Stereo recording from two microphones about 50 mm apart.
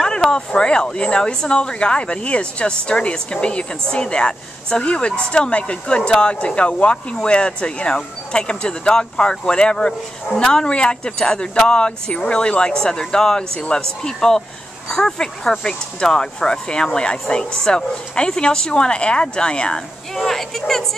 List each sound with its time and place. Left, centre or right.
0.0 s speech: centre
20.2 s speech: centre